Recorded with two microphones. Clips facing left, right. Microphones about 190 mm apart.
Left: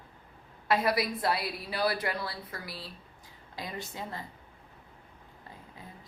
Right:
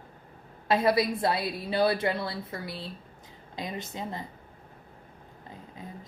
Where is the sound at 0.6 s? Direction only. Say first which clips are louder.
Right 4 dB; 25° right (ahead or behind).